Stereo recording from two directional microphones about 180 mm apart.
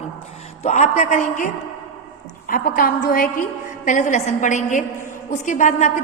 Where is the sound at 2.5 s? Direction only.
50° left (ahead or behind).